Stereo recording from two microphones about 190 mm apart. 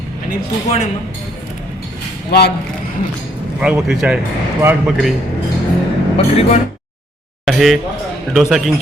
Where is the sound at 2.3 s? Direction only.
60° left (ahead or behind).